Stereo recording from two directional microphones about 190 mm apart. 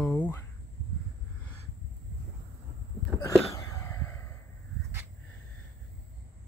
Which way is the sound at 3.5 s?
15° left (ahead or behind).